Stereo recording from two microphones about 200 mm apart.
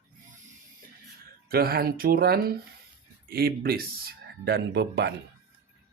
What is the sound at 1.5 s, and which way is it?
Speech, 50° right (ahead or behind).